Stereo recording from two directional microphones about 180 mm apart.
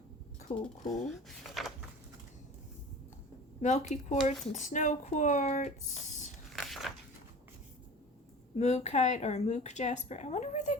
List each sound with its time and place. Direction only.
0.4 s speech: 45° left (ahead or behind)
3.6 s speech: 40° left (ahead or behind)
6.5 s biting: centre (ahead or behind)
8.5 s speech: 35° left (ahead or behind)